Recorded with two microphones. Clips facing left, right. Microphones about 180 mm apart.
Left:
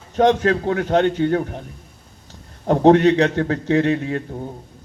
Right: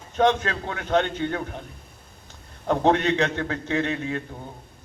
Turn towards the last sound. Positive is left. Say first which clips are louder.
# left 7 dB
turn(degrees=35)  # may be behind; listen again after turning